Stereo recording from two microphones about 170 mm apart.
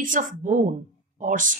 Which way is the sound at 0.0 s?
50° right (ahead or behind).